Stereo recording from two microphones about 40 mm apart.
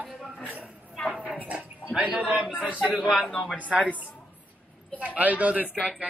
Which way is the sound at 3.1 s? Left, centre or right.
Left.